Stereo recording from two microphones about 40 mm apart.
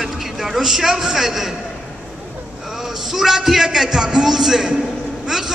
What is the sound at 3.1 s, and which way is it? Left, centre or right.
A man's voice, centre.